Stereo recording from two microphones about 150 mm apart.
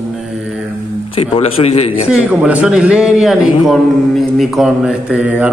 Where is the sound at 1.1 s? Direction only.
40° left (ahead or behind).